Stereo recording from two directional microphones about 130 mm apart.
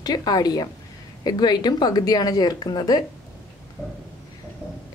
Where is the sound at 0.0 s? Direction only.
30° left (ahead or behind).